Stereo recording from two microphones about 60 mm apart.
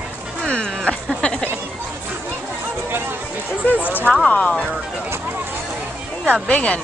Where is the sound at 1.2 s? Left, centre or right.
Centre.